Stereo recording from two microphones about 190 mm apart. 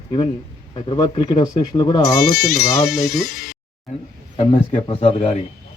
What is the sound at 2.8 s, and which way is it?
Speech, centre (ahead or behind).